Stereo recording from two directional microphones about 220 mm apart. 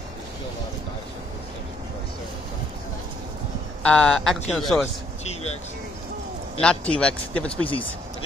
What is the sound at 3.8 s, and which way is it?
Speech, 5° left (ahead or behind).